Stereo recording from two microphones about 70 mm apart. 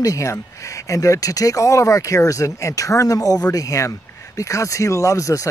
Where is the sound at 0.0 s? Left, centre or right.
Left.